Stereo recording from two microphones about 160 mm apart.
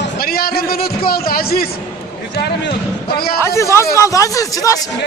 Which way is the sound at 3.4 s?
15° left (ahead or behind).